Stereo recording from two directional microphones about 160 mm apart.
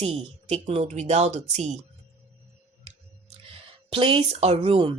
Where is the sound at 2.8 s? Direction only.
35° right (ahead or behind).